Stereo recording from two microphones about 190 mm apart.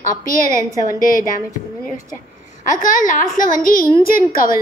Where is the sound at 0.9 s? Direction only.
45° left (ahead or behind).